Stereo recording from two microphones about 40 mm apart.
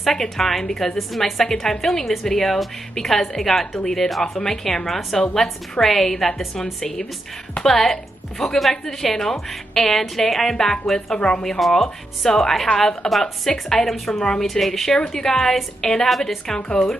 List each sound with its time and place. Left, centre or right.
0.0 s a woman's voice: centre
11.6 s a woman's voice: centre; by 14.4 s left
14.4 s a woman's voice: centre